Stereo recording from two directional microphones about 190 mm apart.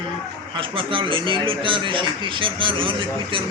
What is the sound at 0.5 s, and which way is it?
Speech, 25° right (ahead or behind).